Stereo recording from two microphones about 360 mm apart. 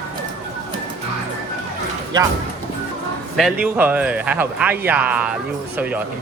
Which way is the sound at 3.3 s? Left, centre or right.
Centre.